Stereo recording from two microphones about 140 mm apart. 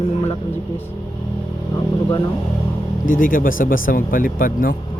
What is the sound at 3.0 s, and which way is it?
Speech, 80° left.